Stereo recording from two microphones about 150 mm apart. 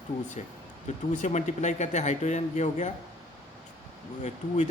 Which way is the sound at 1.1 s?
50° left (ahead or behind).